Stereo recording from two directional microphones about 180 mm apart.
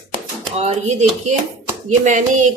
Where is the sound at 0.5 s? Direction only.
35° right (ahead or behind).